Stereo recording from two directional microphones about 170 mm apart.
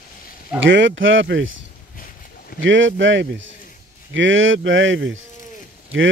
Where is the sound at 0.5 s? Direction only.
90° right.